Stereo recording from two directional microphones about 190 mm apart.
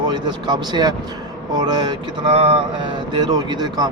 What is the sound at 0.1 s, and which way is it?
Speech, 25° right (ahead or behind).